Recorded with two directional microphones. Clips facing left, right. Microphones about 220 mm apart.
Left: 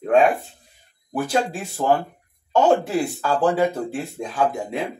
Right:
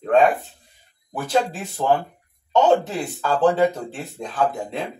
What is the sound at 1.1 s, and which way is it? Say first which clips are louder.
Speech: even; 10° left (ahead or behind).